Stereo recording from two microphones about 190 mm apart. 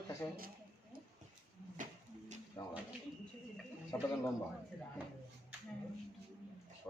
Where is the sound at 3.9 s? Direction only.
15° left (ahead or behind).